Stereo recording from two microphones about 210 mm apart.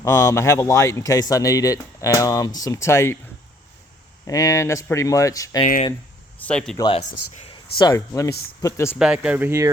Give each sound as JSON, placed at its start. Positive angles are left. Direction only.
{"t": 0.0, "sound": "speech", "side_deg": 15}
{"t": 4.3, "sound": "speech", "side_deg": 15}
{"t": 6.4, "sound": "speech", "side_deg": 5}
{"t": 6.7, "sound": "speech", "side_deg": 25}
{"t": 9.0, "sound": "speech", "side_deg": -5}